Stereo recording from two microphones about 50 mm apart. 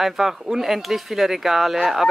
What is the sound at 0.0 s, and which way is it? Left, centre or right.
Speech, centre.